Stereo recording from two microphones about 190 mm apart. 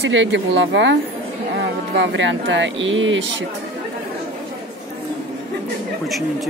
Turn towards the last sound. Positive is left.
turn(degrees=0)  # may be behind; listen again after turning